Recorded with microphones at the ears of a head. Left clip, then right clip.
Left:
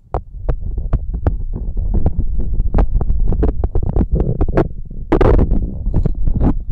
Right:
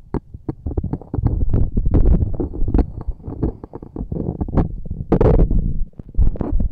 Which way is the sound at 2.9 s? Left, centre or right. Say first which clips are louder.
Left 7 dB; left.